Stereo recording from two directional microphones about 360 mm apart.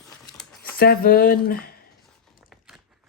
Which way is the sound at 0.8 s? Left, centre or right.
Left.